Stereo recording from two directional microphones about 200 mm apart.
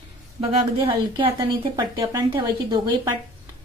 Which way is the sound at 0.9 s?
25° right (ahead or behind).